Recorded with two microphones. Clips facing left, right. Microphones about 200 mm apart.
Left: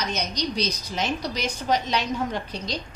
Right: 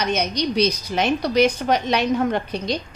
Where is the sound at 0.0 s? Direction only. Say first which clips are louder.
Right 6 dB; 60° right (ahead or behind).